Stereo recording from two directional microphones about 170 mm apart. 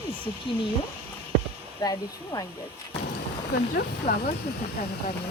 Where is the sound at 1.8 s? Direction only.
20° left (ahead or behind).